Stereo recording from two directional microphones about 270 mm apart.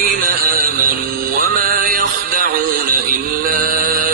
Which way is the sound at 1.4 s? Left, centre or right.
Right.